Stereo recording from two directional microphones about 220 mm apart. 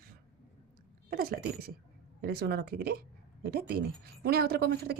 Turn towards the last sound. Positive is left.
turn(degrees=-45)  # may be behind; listen again after turning